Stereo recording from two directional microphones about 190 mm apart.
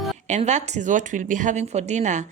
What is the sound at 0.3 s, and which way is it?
Speech, 35° right (ahead or behind).